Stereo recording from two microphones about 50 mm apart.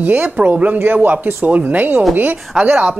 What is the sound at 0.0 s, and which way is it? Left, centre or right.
Speech, right.